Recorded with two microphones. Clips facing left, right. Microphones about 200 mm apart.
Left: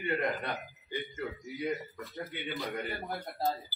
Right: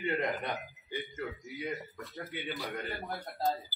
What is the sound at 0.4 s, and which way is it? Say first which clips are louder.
Speech: even; 15° right (ahead or behind).